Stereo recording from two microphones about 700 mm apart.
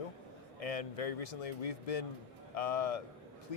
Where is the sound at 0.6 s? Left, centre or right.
Left.